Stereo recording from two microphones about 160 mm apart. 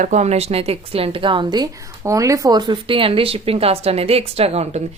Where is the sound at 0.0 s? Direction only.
45° right (ahead or behind).